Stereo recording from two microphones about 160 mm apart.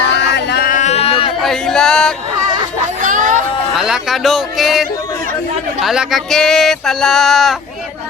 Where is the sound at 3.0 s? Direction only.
55° right (ahead or behind).